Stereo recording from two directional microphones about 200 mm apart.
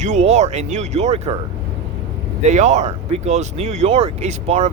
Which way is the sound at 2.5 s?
35° right (ahead or behind).